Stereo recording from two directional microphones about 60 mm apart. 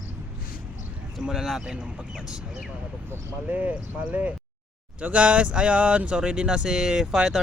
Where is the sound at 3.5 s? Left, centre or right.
Right.